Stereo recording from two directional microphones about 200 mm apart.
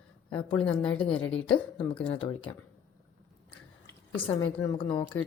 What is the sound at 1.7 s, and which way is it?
Speech, 25° left (ahead or behind).